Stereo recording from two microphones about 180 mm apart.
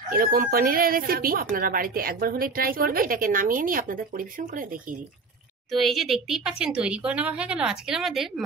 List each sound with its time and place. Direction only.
0.1 s a woman's voice: 55° right (ahead or behind)
5.7 s speech: centre (ahead or behind)